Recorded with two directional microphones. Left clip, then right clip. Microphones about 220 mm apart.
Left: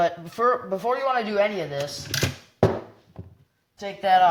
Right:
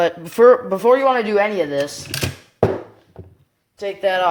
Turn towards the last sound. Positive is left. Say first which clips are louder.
# even
turn(degrees=-35)  # may be behind; listen again after turning